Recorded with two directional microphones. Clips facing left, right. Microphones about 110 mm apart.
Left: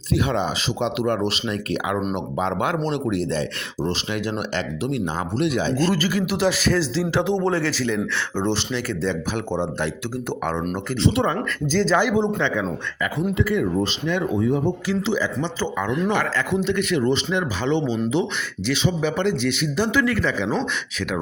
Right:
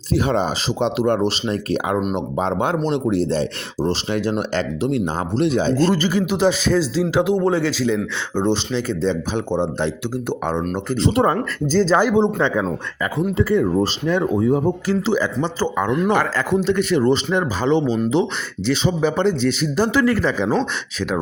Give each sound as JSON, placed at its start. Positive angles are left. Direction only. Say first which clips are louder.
{"t": 0.1, "sound": "speech", "louder": "right 3 dB", "side_deg": -35}
{"t": 11.0, "sound": "speech", "louder": "right 3 dB", "side_deg": -45}